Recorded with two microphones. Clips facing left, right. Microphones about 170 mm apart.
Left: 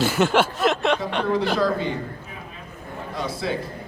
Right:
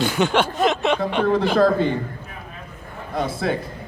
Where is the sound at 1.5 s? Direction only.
55° right (ahead or behind).